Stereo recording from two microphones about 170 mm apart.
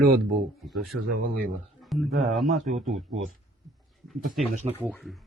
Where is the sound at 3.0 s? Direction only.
40° right (ahead or behind).